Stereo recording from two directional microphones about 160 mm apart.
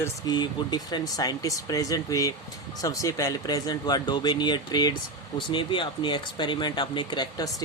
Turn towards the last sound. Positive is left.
turn(degrees=25)  # may be behind; listen again after turning